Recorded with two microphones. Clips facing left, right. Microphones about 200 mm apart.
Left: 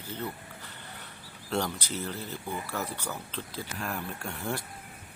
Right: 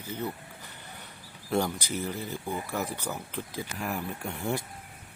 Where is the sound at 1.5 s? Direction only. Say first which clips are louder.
Right 3 dB; 15° right (ahead or behind).